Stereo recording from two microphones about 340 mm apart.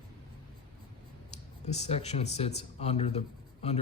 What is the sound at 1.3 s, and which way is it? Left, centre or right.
A man's voice, centre.